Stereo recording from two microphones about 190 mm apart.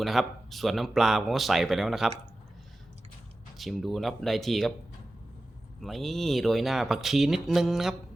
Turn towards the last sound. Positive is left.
turn(degrees=0)  # may be behind; listen again after turning